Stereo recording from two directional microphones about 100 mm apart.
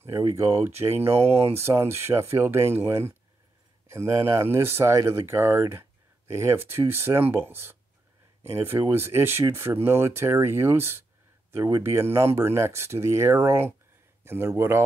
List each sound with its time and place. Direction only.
0.0 s speech: 30° right (ahead or behind)